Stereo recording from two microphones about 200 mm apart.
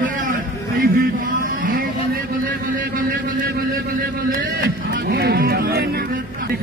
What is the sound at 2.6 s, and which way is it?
Speech, 45° right (ahead or behind).